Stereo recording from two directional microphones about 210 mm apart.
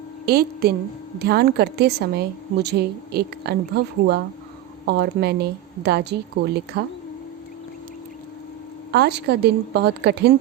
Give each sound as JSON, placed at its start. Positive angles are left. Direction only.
{"t": 0.3, "sound": "a woman's voice", "side_deg": -45}
{"t": 8.9, "sound": "a woman's voice", "side_deg": -50}